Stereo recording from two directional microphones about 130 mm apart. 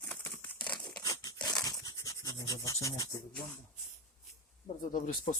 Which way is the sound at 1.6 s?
30° left (ahead or behind).